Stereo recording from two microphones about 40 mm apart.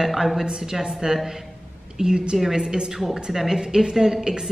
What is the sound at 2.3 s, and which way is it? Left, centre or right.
Speech, centre.